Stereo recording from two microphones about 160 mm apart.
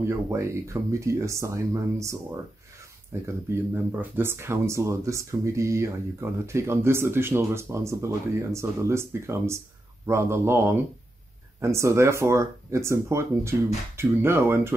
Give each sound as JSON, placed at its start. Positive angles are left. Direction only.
{"t": 0.0, "sound": "speech", "side_deg": -15}